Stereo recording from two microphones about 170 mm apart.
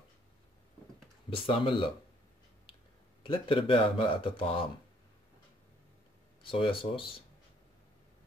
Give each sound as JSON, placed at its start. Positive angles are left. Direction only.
{"t": 1.3, "sound": "speech", "side_deg": 30}
{"t": 3.3, "sound": "speech", "side_deg": 30}
{"t": 6.4, "sound": "speech", "side_deg": 30}